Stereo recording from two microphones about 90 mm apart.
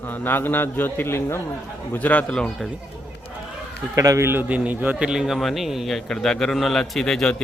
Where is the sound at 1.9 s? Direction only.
20° left (ahead or behind).